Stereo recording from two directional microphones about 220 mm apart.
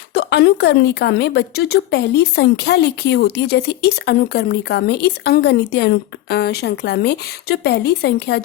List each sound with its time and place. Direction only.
0.1 s speech: 45° left (ahead or behind)